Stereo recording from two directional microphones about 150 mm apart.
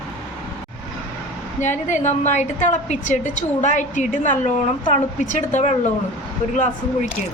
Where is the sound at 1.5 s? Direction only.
55° left (ahead or behind).